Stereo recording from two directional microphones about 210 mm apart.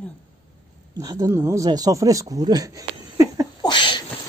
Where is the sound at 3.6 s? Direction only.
20° left (ahead or behind).